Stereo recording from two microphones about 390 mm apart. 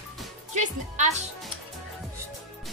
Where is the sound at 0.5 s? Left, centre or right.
Centre.